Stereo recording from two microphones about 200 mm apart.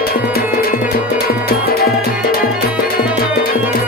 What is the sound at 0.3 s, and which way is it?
Music, 50° left (ahead or behind).